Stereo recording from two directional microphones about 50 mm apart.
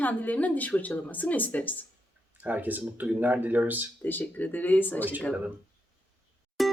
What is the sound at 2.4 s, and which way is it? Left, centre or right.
Speech, right.